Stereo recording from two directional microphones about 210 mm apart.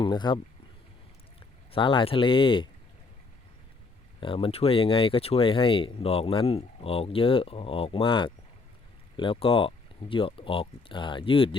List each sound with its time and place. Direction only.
0.0 s speech: 20° left (ahead or behind)
1.7 s speech: 25° left (ahead or behind)
4.2 s speech: 25° left (ahead or behind)